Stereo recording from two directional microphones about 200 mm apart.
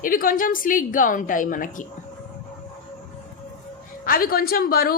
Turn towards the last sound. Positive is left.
turn(degrees=50)  # may be behind; listen again after turning